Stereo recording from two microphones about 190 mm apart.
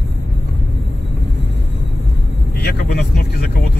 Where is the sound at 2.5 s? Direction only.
60° left (ahead or behind).